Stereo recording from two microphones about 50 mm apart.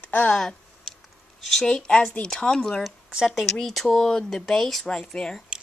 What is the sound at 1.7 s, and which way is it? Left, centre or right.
Speech, centre.